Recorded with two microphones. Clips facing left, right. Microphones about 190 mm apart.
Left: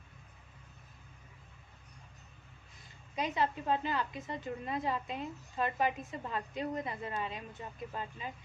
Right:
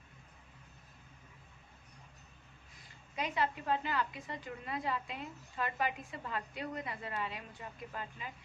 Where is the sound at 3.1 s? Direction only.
20° left (ahead or behind).